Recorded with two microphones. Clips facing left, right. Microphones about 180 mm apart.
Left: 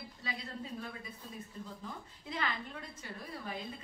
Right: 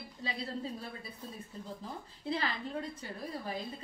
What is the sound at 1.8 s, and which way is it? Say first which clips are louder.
A woman's voice: right 7 dB; 30° right (ahead or behind).